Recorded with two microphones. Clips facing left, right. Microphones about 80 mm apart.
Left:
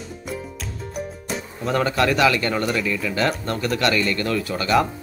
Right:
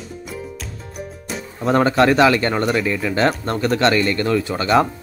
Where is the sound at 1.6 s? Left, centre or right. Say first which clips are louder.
Right 6 dB; right.